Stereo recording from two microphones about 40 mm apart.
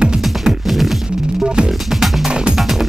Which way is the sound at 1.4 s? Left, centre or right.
Centre.